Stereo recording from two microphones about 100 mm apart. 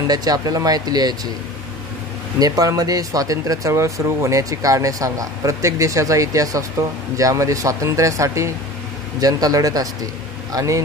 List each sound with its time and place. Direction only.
0.0 s speech: 40° right (ahead or behind)
2.3 s speech: 40° right (ahead or behind)